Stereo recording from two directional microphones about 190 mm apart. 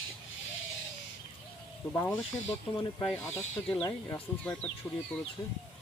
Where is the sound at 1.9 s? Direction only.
15° left (ahead or behind).